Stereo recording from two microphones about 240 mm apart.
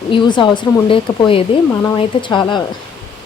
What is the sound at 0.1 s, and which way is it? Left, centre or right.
Speech, centre.